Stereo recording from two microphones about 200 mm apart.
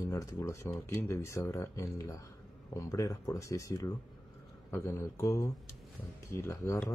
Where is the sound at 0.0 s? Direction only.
15° left (ahead or behind).